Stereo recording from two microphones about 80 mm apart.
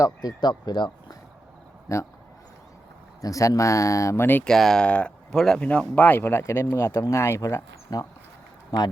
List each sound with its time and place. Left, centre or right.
0.0 s speech: left
1.9 s speech: left
3.2 s speech: left
4.4 s speech: centre; by 8.0 s left